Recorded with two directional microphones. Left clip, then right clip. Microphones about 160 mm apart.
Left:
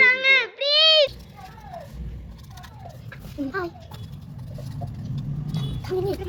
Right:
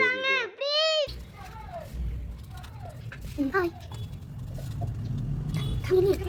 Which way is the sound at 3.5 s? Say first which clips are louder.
Right 2 dB; 20° right (ahead or behind).